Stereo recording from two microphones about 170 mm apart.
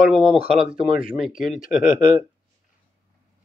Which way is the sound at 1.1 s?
5° right (ahead or behind).